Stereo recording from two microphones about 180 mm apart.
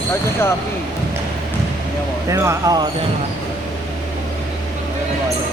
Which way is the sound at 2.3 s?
15° right (ahead or behind).